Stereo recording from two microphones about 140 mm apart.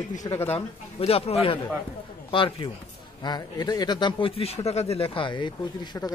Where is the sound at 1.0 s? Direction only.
45° left (ahead or behind).